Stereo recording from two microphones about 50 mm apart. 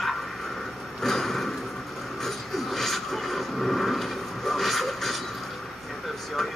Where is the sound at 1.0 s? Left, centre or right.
Centre.